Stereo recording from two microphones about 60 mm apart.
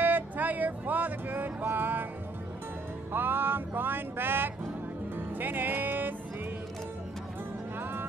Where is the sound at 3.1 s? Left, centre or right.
Right.